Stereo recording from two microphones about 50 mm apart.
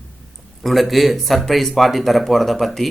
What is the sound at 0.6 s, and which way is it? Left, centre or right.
Speech, centre.